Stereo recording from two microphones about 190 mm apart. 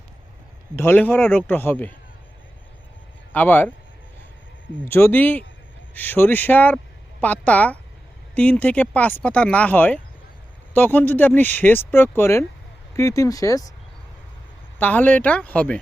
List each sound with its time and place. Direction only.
0.8 s speech: 10° left (ahead or behind)
3.3 s speech: 10° left (ahead or behind)
4.9 s speech: 10° left (ahead or behind)
14.8 s speech: 10° left (ahead or behind)